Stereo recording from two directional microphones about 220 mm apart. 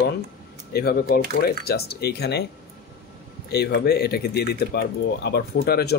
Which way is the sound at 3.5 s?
45° left (ahead or behind).